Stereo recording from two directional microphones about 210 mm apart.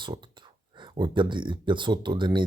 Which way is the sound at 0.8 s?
20° right (ahead or behind).